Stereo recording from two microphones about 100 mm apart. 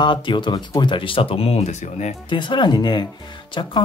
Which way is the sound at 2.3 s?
50° left (ahead or behind).